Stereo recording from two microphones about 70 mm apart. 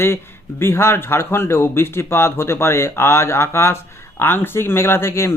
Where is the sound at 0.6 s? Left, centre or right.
Left.